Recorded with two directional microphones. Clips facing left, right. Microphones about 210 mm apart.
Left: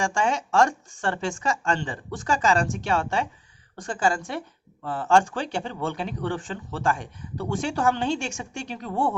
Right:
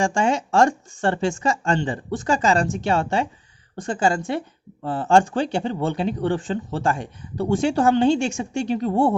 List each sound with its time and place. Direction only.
0.0 s speech: 30° right (ahead or behind)